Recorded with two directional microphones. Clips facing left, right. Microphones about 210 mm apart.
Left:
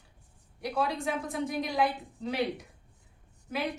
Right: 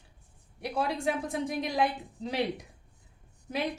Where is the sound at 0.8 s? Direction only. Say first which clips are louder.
Right 1 dB; 35° right (ahead or behind).